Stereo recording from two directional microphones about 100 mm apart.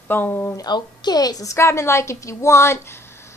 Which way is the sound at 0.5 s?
40° left (ahead or behind).